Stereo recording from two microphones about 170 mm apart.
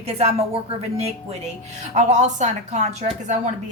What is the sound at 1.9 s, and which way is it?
A woman's voice, 45° right (ahead or behind).